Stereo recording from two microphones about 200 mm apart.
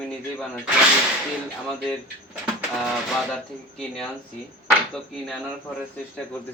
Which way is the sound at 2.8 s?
Centre (ahead or behind).